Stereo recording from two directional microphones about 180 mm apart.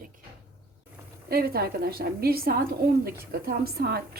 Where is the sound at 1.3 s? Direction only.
60° right (ahead or behind).